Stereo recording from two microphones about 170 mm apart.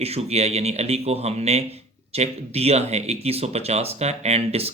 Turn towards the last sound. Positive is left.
turn(degrees=-40)  # may be behind; listen again after turning